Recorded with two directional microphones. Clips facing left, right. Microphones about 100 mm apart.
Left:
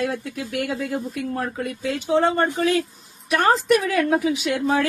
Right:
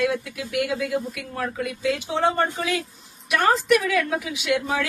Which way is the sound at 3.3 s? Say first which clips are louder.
Left 1 dB; 35° left (ahead or behind).